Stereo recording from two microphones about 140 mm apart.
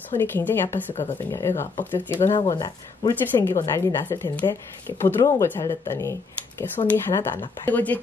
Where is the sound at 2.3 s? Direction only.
30° left (ahead or behind).